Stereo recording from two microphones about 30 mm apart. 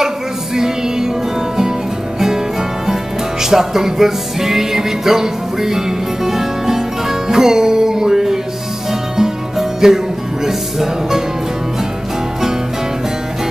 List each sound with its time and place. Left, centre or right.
0.6 s music: centre
2.1 s music: centre
9.6 s music: centre